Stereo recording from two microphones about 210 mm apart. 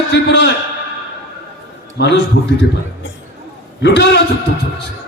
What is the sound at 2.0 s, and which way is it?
Speech, 60° left (ahead or behind).